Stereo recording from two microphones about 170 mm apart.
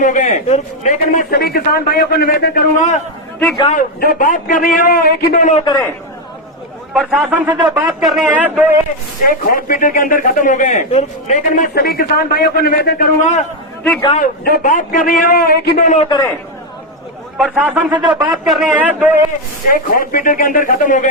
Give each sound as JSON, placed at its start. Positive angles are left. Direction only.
{"t": 0.0, "sound": "speech", "side_deg": 45}
{"t": 1.3, "sound": "a man's voice", "side_deg": 65}
{"t": 5.6, "sound": "a man's voice", "side_deg": 20}
{"t": 6.9, "sound": "speech", "side_deg": -5}
{"t": 7.4, "sound": "speech", "side_deg": -25}
{"t": 7.8, "sound": "speech", "side_deg": 0}
{"t": 9.2, "sound": "speech", "side_deg": 55}
{"t": 11.7, "sound": "a man's voice", "side_deg": 65}
{"t": 17.3, "sound": "speech", "side_deg": -5}
{"t": 19.6, "sound": "speech", "side_deg": 55}